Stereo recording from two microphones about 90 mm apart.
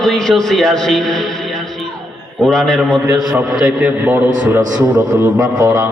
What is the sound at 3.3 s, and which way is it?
A man's voice, 15° right (ahead or behind).